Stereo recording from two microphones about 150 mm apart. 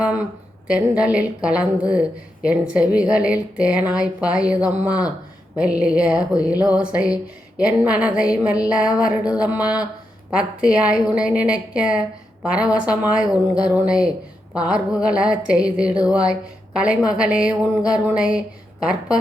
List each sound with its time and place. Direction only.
0.0 s a woman's voice: 10° right (ahead or behind)